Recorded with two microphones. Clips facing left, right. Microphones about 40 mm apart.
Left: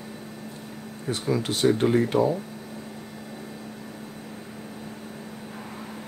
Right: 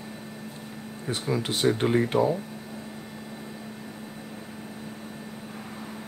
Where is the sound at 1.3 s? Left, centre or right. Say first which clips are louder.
Left 2 dB; right.